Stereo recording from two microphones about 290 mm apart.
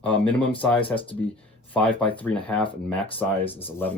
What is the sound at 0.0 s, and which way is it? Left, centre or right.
Speech, centre.